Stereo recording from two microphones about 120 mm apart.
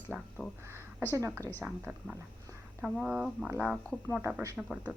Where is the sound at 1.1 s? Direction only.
25° right (ahead or behind).